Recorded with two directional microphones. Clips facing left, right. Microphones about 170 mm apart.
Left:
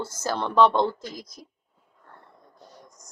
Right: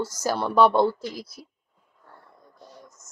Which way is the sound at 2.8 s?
5° right (ahead or behind).